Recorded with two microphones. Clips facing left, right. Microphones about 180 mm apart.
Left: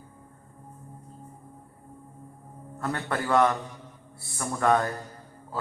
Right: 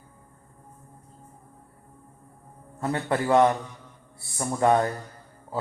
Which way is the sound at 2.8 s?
20° right (ahead or behind).